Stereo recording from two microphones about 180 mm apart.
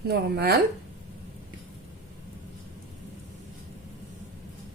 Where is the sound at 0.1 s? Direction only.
60° right (ahead or behind).